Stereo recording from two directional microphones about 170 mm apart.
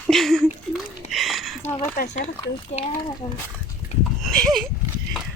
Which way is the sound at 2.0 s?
45° left (ahead or behind).